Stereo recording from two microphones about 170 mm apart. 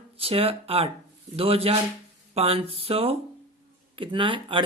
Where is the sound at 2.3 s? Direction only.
35° right (ahead or behind).